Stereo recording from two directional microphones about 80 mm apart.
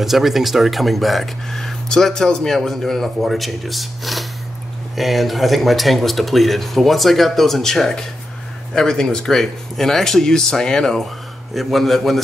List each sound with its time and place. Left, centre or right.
0.0 s speech: centre